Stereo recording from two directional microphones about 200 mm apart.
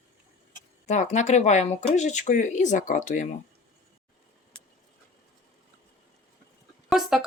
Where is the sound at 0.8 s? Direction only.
35° left (ahead or behind).